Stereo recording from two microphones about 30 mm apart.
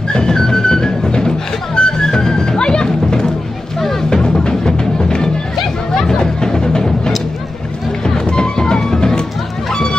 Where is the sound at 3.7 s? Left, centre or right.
Centre.